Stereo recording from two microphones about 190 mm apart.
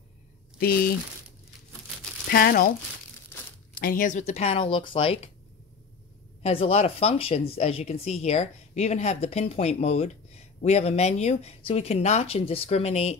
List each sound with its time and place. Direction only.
0.6 s speech: 50° left (ahead or behind)
2.2 s speech: 50° left (ahead or behind)
3.7 s speech: 50° left (ahead or behind); by 5.3 s 30° left (ahead or behind)
6.4 s speech: 30° left (ahead or behind)